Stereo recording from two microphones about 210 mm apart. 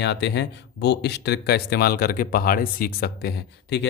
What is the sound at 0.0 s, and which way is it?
Speech, 55° left (ahead or behind).